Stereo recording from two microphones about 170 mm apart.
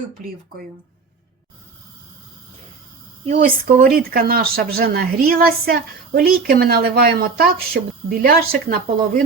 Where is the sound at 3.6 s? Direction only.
65° right (ahead or behind).